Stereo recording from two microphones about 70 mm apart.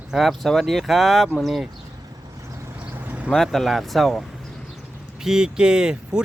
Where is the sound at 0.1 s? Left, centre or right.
Centre.